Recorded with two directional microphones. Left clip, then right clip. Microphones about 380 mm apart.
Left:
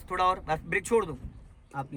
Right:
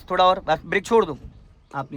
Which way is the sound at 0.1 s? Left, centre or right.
Centre.